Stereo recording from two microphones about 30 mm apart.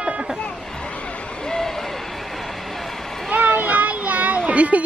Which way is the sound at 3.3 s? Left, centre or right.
Right.